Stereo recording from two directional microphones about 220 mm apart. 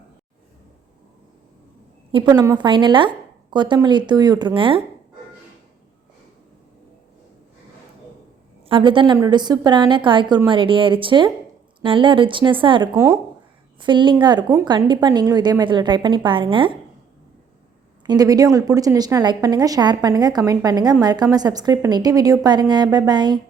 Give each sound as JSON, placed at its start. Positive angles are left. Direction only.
{"t": 2.1, "sound": "a woman's voice", "side_deg": -20}
{"t": 8.7, "sound": "a woman's voice", "side_deg": -25}
{"t": 18.0, "sound": "a woman's voice", "side_deg": -20}